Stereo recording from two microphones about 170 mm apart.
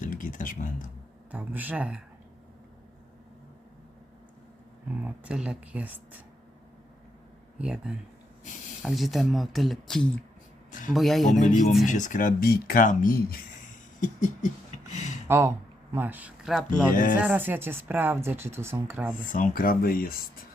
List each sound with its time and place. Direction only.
0.0 s speech: 50° left (ahead or behind)
1.3 s speech: 10° right (ahead or behind)
5.0 s speech: 5° right (ahead or behind)
7.6 s speech: 5° right (ahead or behind)
10.7 s speech: 50° left (ahead or behind)
10.9 s speech: centre (ahead or behind)
11.3 s speech: 45° left (ahead or behind); by 13.4 s 60° left (ahead or behind)
14.0 s speech: 50° left (ahead or behind)
14.9 s a sound: 45° left (ahead or behind)
15.3 s a man's voice: 15° right (ahead or behind)
16.9 s speech: 55° left (ahead or behind)
17.2 s speech: 10° right (ahead or behind)
19.3 s speech: 55° left (ahead or behind)